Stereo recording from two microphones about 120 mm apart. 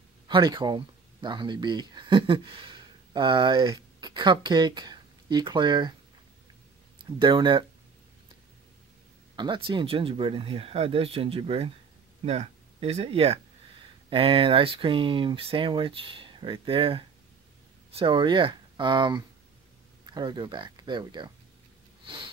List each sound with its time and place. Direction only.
0.3 s speech: 40° right (ahead or behind)
7.1 s speech: 40° right (ahead or behind)
9.3 s speech: 40° right (ahead or behind)
22.0 s sniff: 45° right (ahead or behind)